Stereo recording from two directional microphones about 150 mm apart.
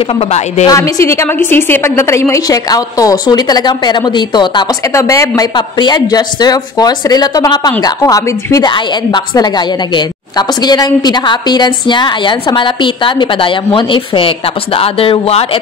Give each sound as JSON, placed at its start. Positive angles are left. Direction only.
{"t": 0.0, "sound": "a woman's voice", "side_deg": 40}
{"t": 0.7, "sound": "a woman's voice", "side_deg": 20}